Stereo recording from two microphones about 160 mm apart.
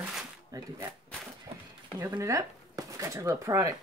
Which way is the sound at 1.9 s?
20° right (ahead or behind).